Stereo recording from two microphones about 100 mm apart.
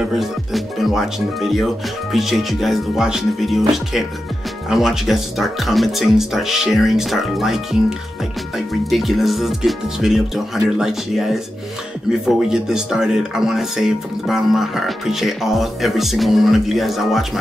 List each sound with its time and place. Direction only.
0.0 s speech: centre (ahead or behind)